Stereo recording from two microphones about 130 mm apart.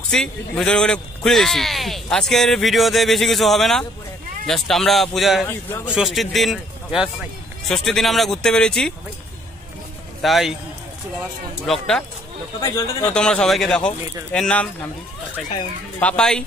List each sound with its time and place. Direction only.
0.1 s a man's voice: 5° left (ahead or behind)
10.2 s a man's voice: centre (ahead or behind)
11.6 s a man's voice: 5° left (ahead or behind)
12.5 s speech: 30° left (ahead or behind)
13.0 s speech: 5° left (ahead or behind)
16.0 s speech: 5° left (ahead or behind)